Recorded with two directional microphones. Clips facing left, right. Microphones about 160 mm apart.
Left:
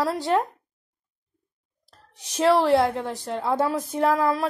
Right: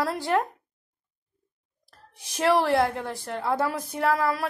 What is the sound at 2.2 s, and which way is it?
Speech, 20° left (ahead or behind).